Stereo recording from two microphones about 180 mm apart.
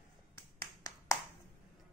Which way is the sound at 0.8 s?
20° left (ahead or behind).